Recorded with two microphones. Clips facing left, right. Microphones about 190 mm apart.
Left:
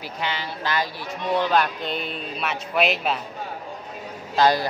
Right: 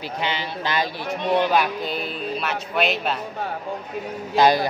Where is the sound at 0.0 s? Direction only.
20° right (ahead or behind); by 3.2 s centre (ahead or behind).